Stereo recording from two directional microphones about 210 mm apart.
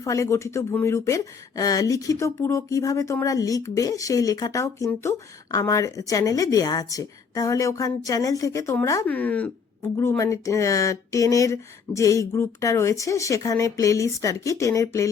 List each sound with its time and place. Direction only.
0.0 s speech: 15° left (ahead or behind)